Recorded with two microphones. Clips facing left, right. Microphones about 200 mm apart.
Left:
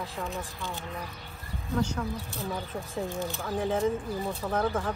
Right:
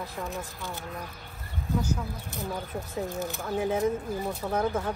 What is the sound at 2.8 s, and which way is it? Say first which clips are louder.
Speech: right 1 dB; centre (ahead or behind).